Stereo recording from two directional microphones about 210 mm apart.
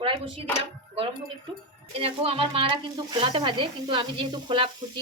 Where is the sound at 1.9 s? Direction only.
25° right (ahead or behind).